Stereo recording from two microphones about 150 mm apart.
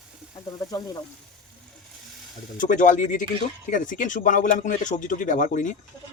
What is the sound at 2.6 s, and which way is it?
Speech, 60° left (ahead or behind).